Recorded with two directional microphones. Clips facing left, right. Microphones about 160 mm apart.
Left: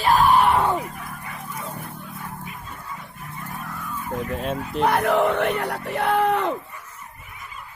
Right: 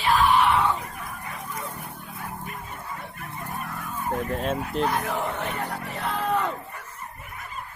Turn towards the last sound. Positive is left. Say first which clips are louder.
# left 6 dB
turn(degrees=65)  # may be behind; listen again after turning